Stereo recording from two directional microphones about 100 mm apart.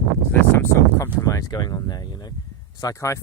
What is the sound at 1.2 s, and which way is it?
Speech, 35° left (ahead or behind).